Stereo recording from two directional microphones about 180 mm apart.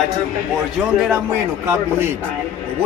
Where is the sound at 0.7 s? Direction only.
5° right (ahead or behind).